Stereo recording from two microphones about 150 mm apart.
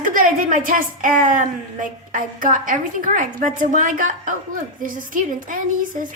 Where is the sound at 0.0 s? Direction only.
65° right (ahead or behind).